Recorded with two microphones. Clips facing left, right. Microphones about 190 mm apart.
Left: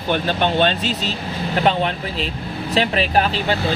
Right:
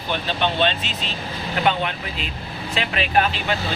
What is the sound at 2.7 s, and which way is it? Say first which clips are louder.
Speech: left 3 dB; 35° left (ahead or behind).